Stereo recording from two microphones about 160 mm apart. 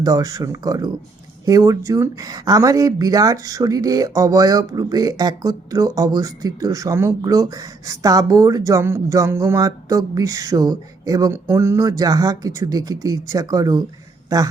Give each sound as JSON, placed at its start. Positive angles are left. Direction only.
{"t": 0.0, "sound": "speech", "side_deg": -20}